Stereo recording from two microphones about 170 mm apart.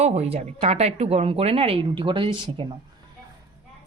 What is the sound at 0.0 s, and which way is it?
Speech, 40° right (ahead or behind).